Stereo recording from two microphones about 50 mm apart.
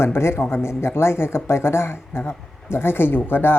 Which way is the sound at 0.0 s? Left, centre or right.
Left.